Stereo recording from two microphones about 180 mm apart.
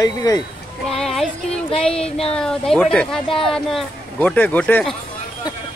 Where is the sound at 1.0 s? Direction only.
Centre (ahead or behind).